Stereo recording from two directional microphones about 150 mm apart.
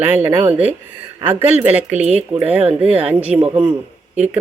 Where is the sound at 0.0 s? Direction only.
15° right (ahead or behind).